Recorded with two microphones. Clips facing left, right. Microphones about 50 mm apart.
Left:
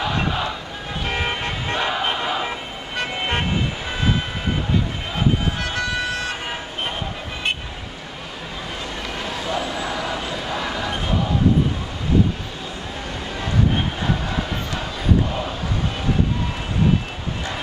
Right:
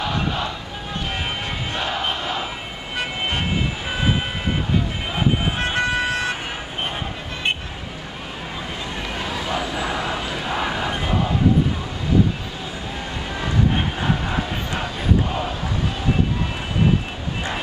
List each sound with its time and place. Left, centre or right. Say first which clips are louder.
0.0 s vehicle: left 1 dB; centre
1.8 s battle cry: left 2 dB; centre
5.6 s vehicle: right 3 dB; right
9.2 s vehicle: even; right
10.4 s a sound: right 2 dB; right
14.0 s crowd: right 1 dB; right